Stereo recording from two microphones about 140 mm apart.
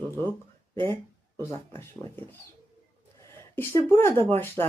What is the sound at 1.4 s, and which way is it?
Speech, 15° left (ahead or behind).